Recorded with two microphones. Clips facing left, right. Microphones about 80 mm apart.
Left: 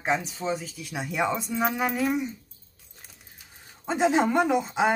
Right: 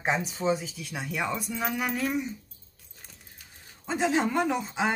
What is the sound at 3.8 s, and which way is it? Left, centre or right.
Speech, centre.